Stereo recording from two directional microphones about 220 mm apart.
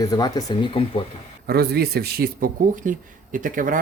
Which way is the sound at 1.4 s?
45° right (ahead or behind).